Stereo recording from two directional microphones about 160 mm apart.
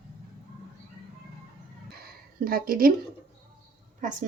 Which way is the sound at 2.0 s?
70° right (ahead or behind).